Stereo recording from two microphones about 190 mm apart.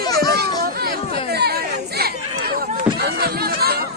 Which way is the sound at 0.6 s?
55° right (ahead or behind).